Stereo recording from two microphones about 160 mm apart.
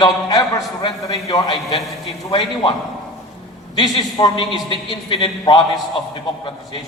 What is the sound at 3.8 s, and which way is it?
A man's voice, 30° left (ahead or behind).